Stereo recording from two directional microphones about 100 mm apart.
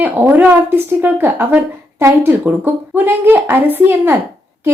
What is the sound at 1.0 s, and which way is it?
A woman's voice, 20° right (ahead or behind).